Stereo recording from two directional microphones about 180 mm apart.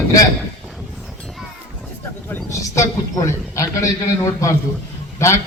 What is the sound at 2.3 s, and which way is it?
A man's voice, 15° left (ahead or behind).